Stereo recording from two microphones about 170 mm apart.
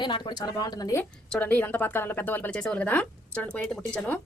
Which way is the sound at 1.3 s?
10° left (ahead or behind).